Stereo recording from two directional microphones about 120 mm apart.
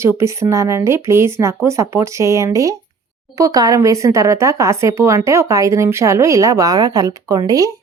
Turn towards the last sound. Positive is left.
turn(degrees=-30)  # may be behind; listen again after turning